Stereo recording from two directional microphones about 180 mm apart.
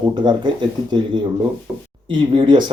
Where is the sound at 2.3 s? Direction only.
25° right (ahead or behind).